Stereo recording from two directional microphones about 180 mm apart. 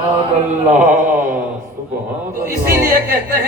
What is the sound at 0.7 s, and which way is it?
Speech, 45° right (ahead or behind).